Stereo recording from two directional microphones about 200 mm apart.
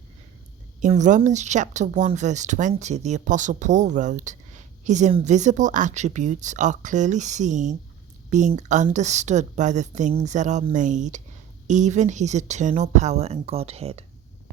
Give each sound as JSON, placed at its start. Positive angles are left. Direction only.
{"t": 0.8, "sound": "speech", "side_deg": -35}